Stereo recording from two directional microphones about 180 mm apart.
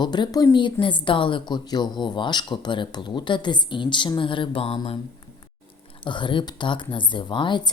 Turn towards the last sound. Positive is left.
turn(degrees=25)  # may be behind; listen again after turning